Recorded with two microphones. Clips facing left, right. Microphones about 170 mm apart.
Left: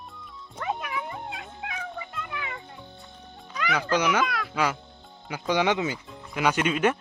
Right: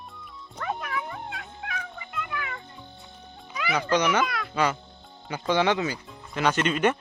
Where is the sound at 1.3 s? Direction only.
20° left (ahead or behind).